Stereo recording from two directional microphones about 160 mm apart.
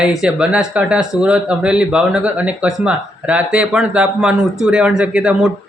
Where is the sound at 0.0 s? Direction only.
5° right (ahead or behind).